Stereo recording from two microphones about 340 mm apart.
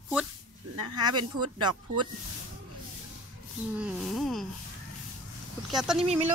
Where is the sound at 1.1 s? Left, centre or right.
Right.